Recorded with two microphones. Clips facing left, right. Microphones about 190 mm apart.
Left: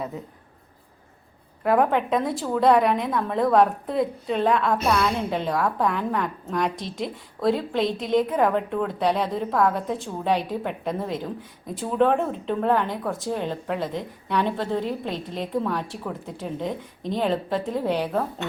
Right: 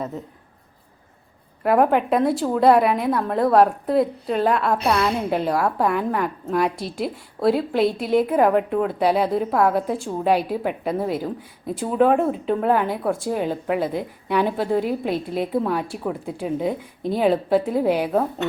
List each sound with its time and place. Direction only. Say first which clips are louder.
1.6 s a woman's voice: right 3 dB; 5° right (ahead or behind)